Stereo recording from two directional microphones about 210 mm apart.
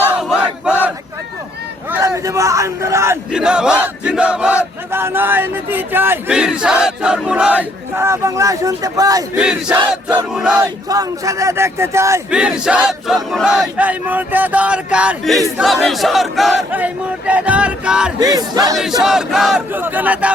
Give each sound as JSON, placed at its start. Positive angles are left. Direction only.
{"t": 0.2, "sound": "battle cry", "side_deg": -5}
{"t": 1.9, "sound": "speech", "side_deg": -15}
{"t": 9.4, "sound": "speech", "side_deg": -5}
{"t": 10.8, "sound": "speech", "side_deg": -15}
{"t": 18.2, "sound": "speech", "side_deg": -20}
{"t": 18.8, "sound": "speech", "side_deg": 0}